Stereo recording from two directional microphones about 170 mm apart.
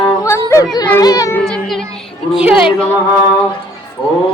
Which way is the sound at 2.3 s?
5° right (ahead or behind).